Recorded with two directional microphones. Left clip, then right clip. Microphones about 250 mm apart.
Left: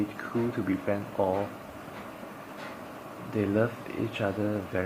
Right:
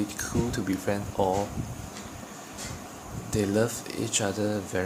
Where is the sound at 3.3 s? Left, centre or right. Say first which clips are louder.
Right 2 dB; centre.